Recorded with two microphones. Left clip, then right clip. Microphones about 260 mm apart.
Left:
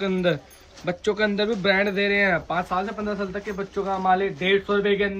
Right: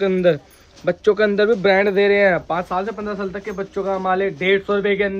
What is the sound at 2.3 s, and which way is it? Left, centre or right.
A man's voice, centre.